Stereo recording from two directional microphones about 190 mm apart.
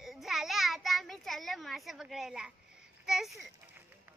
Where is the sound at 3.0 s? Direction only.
Centre (ahead or behind).